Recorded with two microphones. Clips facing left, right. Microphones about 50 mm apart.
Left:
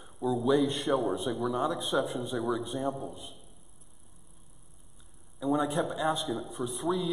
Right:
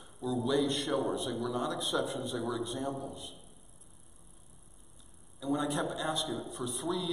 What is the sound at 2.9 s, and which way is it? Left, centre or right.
Speech, centre.